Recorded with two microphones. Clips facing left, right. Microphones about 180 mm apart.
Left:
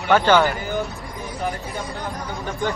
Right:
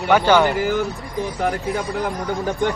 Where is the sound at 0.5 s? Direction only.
90° right.